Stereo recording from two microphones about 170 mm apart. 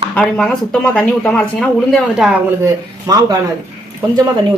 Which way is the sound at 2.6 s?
20° right (ahead or behind).